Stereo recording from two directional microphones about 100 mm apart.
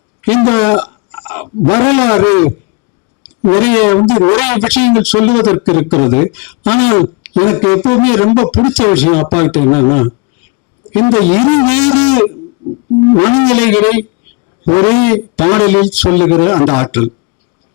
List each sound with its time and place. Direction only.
0.2 s a man's voice: 20° left (ahead or behind)